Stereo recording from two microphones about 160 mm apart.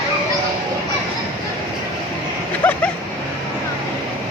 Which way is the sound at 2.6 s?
10° left (ahead or behind).